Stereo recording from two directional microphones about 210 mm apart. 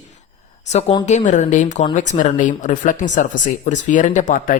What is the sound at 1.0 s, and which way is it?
Speech, 35° left (ahead or behind).